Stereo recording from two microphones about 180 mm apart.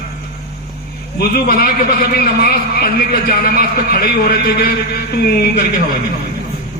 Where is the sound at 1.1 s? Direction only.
60° left (ahead or behind).